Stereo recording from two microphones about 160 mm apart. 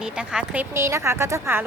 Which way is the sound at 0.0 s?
5° right (ahead or behind).